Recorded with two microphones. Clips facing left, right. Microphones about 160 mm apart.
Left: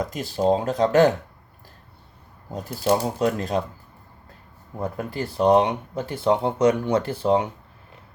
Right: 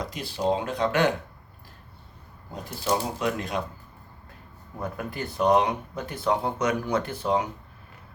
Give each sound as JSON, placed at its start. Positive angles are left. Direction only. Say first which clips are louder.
{"t": 0.0, "sound": "speech", "louder": "left 5 dB", "side_deg": 45}
{"t": 2.5, "sound": "speech", "louder": "left 5 dB", "side_deg": 45}
{"t": 4.8, "sound": "speech", "louder": "left 4 dB", "side_deg": 30}